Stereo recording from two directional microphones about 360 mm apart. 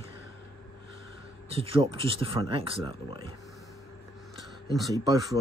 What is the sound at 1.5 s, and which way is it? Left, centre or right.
Speech, centre.